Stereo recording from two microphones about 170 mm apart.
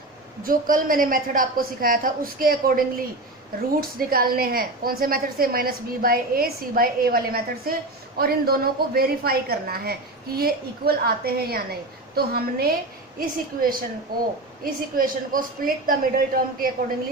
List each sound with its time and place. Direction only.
0.4 s a woman's voice: 55° right (ahead or behind)